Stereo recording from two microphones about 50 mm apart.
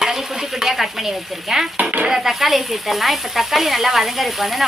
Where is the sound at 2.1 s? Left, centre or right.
Centre.